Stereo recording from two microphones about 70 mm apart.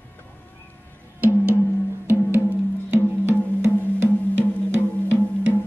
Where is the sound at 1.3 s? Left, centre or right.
Right.